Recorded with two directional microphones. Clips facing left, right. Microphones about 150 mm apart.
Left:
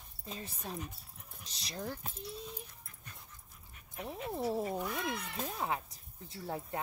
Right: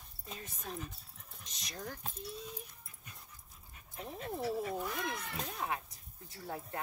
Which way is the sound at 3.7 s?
30° right (ahead or behind).